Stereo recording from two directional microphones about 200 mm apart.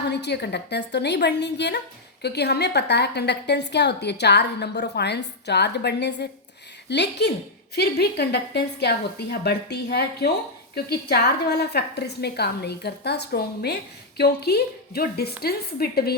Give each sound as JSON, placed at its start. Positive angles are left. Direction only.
{"t": 0.0, "sound": "a woman's voice", "side_deg": 60}